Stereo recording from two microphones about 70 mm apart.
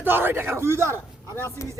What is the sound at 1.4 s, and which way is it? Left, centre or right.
Speech, left.